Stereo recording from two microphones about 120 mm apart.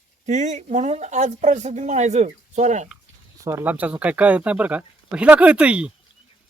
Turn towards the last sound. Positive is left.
turn(degrees=-10)  # may be behind; listen again after turning